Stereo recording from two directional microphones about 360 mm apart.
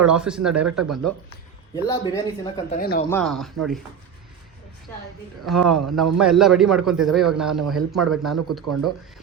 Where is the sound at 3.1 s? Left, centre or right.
Centre.